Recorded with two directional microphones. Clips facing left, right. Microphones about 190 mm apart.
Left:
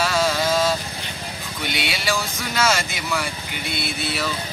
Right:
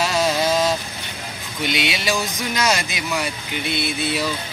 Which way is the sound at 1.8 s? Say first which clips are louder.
Right 1 dB; 20° right (ahead or behind).